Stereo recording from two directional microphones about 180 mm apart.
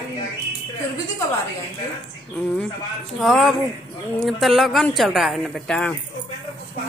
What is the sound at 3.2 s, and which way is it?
A woman's voice, centre (ahead or behind).